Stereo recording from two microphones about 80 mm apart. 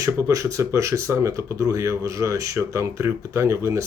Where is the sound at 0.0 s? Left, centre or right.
Right.